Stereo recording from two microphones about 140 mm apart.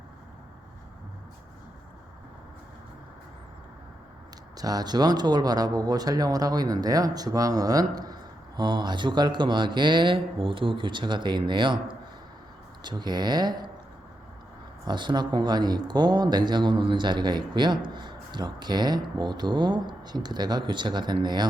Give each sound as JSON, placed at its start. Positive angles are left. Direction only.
{"t": 4.5, "sound": "speech", "side_deg": -25}
{"t": 14.8, "sound": "speech", "side_deg": -30}